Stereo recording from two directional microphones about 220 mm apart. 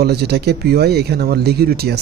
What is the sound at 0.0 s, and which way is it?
Speech, 45° right (ahead or behind).